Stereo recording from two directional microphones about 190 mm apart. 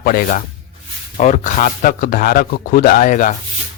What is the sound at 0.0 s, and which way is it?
Speech, 45° left (ahead or behind).